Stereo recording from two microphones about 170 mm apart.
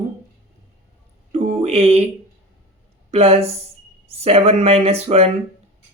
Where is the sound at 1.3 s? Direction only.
45° right (ahead or behind).